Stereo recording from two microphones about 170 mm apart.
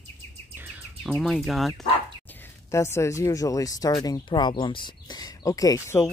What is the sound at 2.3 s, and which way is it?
Speech, 15° left (ahead or behind).